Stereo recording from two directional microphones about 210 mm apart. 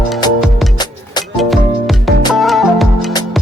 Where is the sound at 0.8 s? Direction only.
20° left (ahead or behind).